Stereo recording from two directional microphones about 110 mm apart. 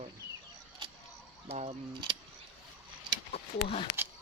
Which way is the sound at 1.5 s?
60° right (ahead or behind).